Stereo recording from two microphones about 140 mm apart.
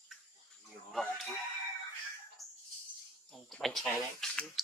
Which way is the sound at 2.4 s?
25° right (ahead or behind).